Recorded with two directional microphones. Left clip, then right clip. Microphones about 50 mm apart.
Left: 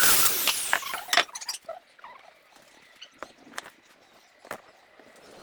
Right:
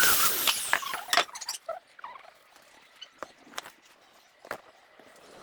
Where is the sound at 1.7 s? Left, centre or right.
Right.